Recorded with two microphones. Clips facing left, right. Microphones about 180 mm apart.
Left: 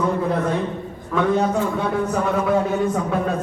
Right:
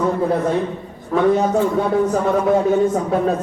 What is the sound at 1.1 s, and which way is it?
Speech, 35° right (ahead or behind).